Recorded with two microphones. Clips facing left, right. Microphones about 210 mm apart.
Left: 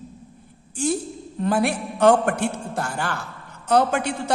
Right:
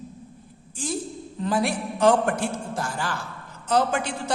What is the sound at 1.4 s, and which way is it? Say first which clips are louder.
A man's voice: left 3 dB; 60° left (ahead or behind).